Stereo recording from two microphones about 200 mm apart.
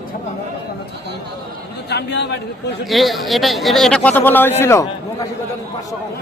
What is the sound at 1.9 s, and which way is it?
Speech, 55° left (ahead or behind).